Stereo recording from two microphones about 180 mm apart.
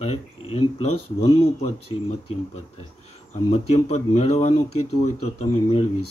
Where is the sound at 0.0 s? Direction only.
35° left (ahead or behind).